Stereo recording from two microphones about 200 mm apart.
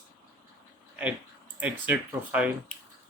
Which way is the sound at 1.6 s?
10° right (ahead or behind).